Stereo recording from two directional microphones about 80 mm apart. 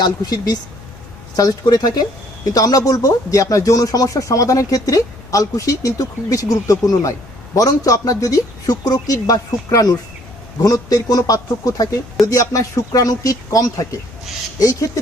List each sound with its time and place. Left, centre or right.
0.0 s speech: left